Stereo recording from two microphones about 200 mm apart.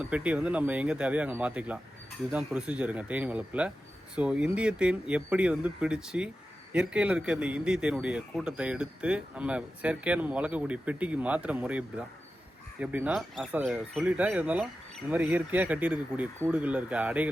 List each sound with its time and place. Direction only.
0.0 s a man's voice: 5° right (ahead or behind)